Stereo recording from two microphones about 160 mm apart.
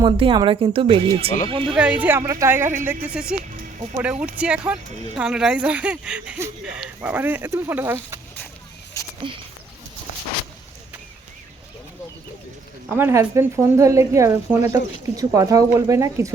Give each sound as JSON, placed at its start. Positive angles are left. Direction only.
{"t": 0.0, "sound": "speech", "side_deg": -30}
{"t": 1.7, "sound": "speech", "side_deg": -5}
{"t": 13.0, "sound": "a woman's voice", "side_deg": -15}